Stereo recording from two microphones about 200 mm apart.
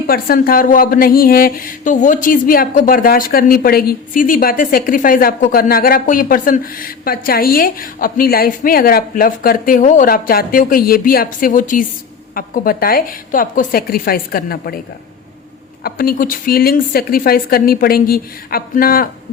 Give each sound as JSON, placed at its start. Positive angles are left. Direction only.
{"t": 0.1, "sound": "speech", "side_deg": 45}
{"t": 15.8, "sound": "speech", "side_deg": 45}